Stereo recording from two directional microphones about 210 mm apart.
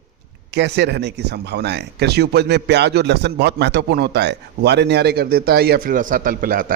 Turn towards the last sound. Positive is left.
turn(degrees=-40)  # may be behind; listen again after turning